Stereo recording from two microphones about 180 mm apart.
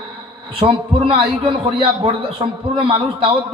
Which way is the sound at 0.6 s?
30° right (ahead or behind).